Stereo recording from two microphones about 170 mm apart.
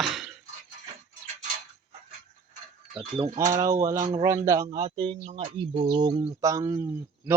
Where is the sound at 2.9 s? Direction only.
30° right (ahead or behind).